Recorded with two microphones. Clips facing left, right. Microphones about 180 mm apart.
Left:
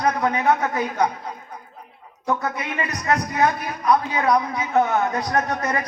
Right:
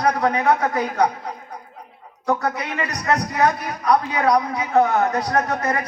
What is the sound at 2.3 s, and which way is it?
A man's voice, 35° right (ahead or behind).